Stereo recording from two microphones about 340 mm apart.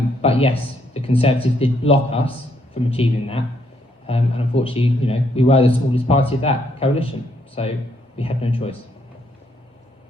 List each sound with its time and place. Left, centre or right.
0.2 s a man's voice: centre